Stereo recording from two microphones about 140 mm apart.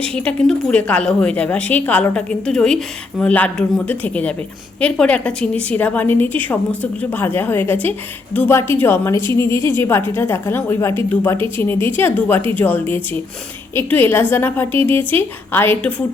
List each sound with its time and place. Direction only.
0.1 s a woman's voice: 5° left (ahead or behind)